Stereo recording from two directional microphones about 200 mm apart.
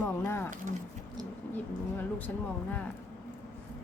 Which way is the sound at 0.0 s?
10° left (ahead or behind).